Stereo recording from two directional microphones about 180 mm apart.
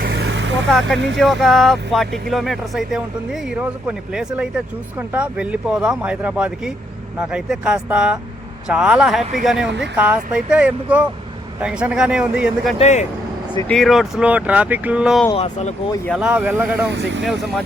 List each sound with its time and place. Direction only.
0.0 s vehicle: 65° right (ahead or behind)
0.7 s speech: centre (ahead or behind)
0.9 s speech: 85° right
1.2 s speech: centre (ahead or behind)
9.6 s speech: 80° right
9.9 s speech: 5° right (ahead or behind)
12.8 s speech: 40° left (ahead or behind)
13.7 s speech: centre (ahead or behind)
15.4 s speech: 40° left (ahead or behind)
16.0 s speech: 5° right (ahead or behind)
16.9 s speech: 80° right